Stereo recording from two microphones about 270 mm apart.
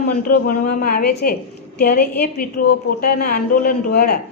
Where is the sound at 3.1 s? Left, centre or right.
Left.